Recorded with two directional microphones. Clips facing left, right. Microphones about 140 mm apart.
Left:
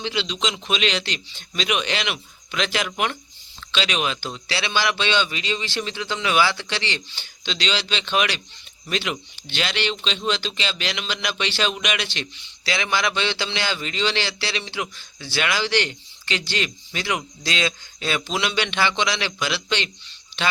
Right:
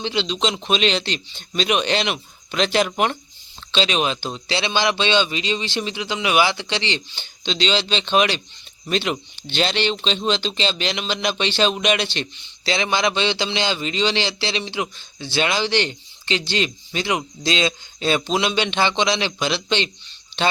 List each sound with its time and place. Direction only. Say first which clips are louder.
0.0 s speech: right 3 dB; 25° right (ahead or behind)